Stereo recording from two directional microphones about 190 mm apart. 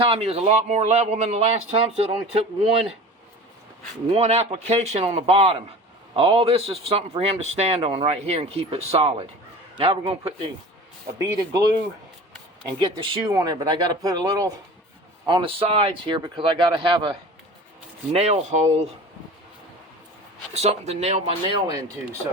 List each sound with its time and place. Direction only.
0.0 s a man's voice: 30° right (ahead or behind)
4.1 s a man's voice: 35° right (ahead or behind)
11.2 s speech: 15° right (ahead or behind)
12.8 s a man's voice: 25° right (ahead or behind)
20.5 s a man's voice: 35° right (ahead or behind)